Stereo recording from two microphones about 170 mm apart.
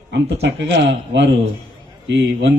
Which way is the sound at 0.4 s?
90° right.